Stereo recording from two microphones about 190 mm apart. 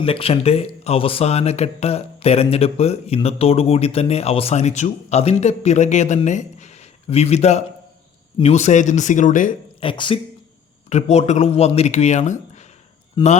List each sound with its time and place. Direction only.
0.0 s speech: 30° left (ahead or behind)
9.8 s speech: 25° left (ahead or behind)
10.8 s speech: 35° left (ahead or behind)